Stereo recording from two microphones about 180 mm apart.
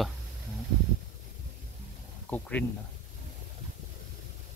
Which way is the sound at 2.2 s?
10° left (ahead or behind).